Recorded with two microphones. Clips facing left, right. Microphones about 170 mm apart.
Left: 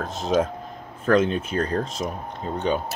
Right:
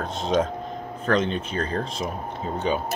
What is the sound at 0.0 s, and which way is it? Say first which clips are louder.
Speech: left 1 dB; centre (ahead or behind).